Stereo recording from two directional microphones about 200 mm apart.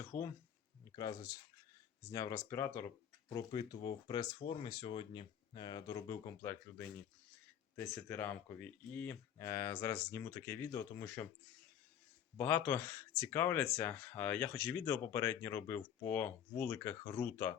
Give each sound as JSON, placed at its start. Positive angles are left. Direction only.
{"t": 0.0, "sound": "a sound", "side_deg": 15}
{"t": 0.9, "sound": "speech", "side_deg": 20}
{"t": 12.4, "sound": "speech", "side_deg": 10}